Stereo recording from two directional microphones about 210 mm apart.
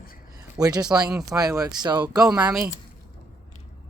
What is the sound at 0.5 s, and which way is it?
Speech, 20° right (ahead or behind).